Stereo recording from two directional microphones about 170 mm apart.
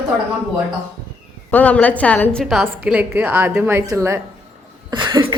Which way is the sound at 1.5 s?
10° left (ahead or behind).